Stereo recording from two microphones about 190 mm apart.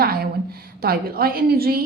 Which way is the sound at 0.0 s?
55° right (ahead or behind).